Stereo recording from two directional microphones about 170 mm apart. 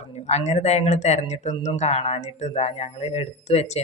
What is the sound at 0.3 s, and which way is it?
Speech, 40° left (ahead or behind).